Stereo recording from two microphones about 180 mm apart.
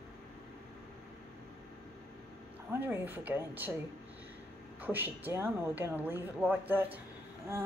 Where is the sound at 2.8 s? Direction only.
10° right (ahead or behind).